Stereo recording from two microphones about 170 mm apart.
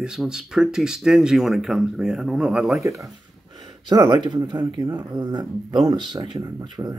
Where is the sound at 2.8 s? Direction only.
20° right (ahead or behind).